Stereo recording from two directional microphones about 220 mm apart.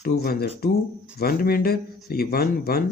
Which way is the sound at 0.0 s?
45° left (ahead or behind).